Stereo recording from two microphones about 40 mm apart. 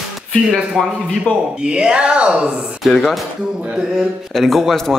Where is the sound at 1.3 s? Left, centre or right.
Left.